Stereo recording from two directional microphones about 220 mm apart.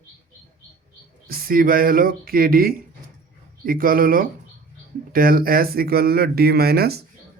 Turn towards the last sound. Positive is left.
turn(degrees=-45)  # may be behind; listen again after turning